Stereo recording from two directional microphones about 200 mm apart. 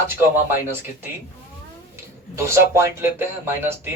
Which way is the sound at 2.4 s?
15° right (ahead or behind).